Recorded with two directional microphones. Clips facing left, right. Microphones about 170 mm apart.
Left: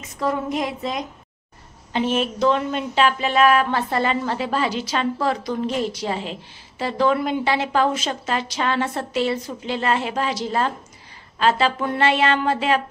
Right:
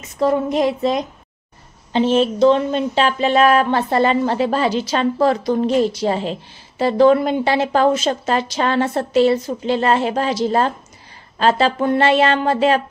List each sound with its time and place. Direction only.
0.2 s a woman's voice: 30° right (ahead or behind)